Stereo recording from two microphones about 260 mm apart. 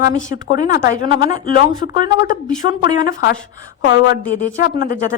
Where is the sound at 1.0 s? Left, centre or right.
Centre.